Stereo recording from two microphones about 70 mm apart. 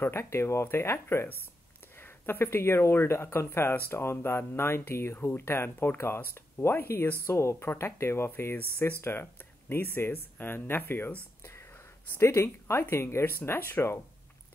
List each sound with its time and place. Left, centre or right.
0.0 s speech: left